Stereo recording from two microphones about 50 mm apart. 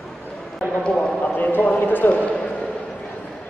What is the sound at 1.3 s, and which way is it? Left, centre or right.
Clip-clop, left.